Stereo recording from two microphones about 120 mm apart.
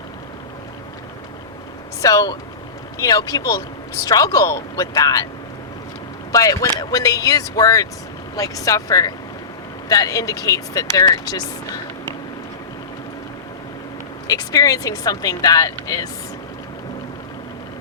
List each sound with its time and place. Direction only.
2.0 s speech: 30° left (ahead or behind)
6.3 s speech: 30° left (ahead or behind)
14.3 s speech: 30° left (ahead or behind)